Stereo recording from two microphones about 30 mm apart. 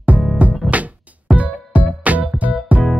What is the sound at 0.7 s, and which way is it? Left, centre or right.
Music, right.